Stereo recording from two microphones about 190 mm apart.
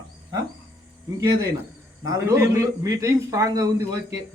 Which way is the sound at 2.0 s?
15° right (ahead or behind).